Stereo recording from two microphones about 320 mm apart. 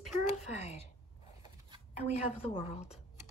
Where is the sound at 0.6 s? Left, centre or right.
Centre.